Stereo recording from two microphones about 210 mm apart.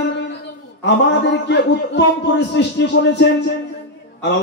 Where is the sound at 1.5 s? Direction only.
55° left (ahead or behind).